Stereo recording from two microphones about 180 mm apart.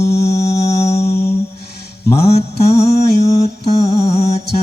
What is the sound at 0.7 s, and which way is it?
Music, 35° left (ahead or behind).